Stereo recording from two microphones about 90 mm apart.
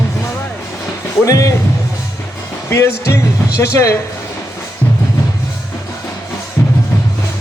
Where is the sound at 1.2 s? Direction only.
35° left (ahead or behind).